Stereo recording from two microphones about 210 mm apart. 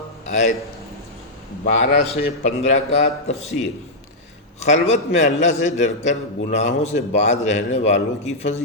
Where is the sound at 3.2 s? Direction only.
30° left (ahead or behind).